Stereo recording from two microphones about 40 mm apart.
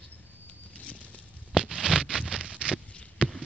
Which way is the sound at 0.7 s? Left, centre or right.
Left.